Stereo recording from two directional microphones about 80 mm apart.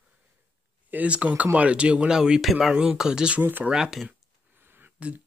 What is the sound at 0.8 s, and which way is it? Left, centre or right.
Speech, centre.